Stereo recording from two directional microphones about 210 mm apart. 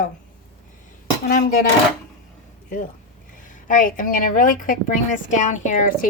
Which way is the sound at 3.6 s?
40° left (ahead or behind).